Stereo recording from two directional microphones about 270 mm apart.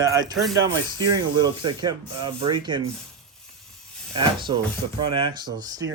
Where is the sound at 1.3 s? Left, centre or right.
Centre.